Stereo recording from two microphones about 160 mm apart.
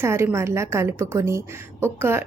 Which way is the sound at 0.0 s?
15° right (ahead or behind).